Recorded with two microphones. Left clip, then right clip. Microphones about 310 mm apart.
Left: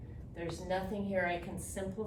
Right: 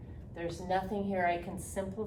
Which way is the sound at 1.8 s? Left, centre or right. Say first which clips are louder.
Right 3 dB; centre.